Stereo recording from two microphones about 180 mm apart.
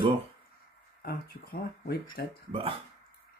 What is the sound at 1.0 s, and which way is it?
Speech, 55° left (ahead or behind).